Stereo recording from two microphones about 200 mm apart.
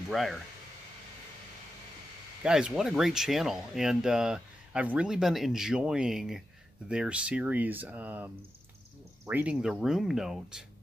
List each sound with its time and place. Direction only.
0.1 s speech: centre (ahead or behind)
2.4 s speech: 5° right (ahead or behind)